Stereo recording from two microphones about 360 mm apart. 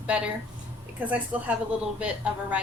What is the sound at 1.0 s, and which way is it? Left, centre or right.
Speech, centre.